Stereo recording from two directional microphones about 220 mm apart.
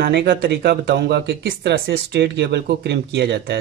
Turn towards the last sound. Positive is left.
turn(degrees=-50)  # may be behind; listen again after turning